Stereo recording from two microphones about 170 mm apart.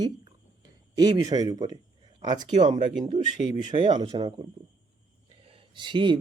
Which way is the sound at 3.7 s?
30° right (ahead or behind).